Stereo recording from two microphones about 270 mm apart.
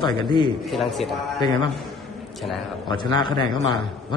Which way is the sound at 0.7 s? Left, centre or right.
Centre.